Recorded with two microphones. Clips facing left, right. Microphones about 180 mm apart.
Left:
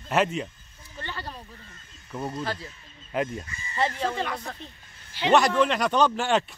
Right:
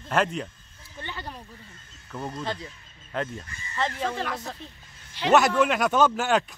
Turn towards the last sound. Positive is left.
turn(degrees=0)  # may be behind; listen again after turning